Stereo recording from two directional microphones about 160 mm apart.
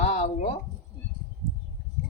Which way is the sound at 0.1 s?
45° left (ahead or behind).